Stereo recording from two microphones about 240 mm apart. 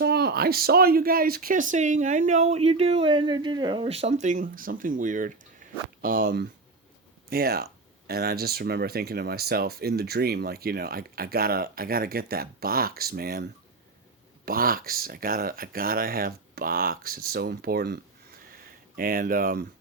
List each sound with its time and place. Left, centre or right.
0.0 s speech: right
14.4 s speech: right